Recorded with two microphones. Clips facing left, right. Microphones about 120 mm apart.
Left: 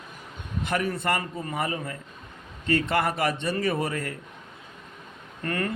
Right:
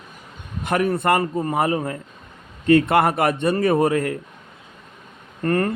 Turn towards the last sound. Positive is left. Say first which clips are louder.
# right 8 dB
turn(degrees=-40)  # may be behind; listen again after turning